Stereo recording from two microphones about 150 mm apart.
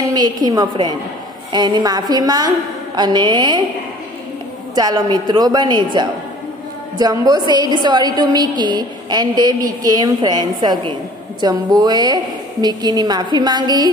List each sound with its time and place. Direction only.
0.1 s a woman's voice: 25° right (ahead or behind)
4.7 s a woman's voice: 25° right (ahead or behind)